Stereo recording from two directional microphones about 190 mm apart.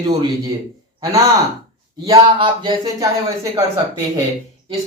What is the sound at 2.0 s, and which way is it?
A man's voice, 25° right (ahead or behind).